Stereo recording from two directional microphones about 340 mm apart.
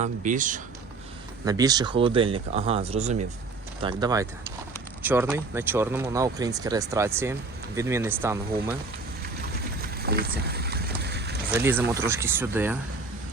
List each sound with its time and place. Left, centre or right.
0.0 s speech: right
1.5 s speech: centre
9.8 s boat: right
11.5 s speech: centre